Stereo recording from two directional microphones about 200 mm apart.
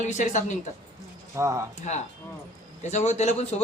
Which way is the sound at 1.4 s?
15° right (ahead or behind).